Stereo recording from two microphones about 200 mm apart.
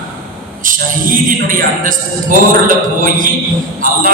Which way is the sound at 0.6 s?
45° right (ahead or behind).